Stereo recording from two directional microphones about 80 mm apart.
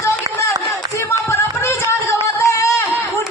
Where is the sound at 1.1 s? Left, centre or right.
Left.